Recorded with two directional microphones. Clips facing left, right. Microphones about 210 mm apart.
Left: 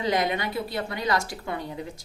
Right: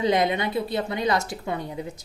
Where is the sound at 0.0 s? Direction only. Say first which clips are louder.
Right 3 dB; 25° right (ahead or behind).